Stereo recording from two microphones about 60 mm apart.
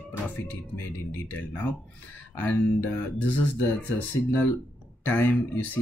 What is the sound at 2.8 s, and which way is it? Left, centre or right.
Speech, left.